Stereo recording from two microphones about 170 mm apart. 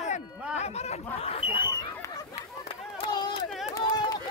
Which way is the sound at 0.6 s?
40° left (ahead or behind).